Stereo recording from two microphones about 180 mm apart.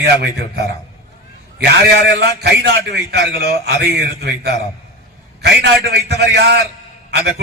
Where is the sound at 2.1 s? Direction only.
65° right (ahead or behind).